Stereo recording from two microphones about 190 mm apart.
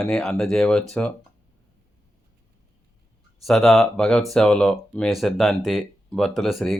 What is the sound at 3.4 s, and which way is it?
Speech, centre (ahead or behind).